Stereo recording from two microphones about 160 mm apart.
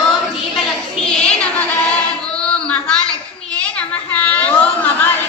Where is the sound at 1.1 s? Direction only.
5° left (ahead or behind).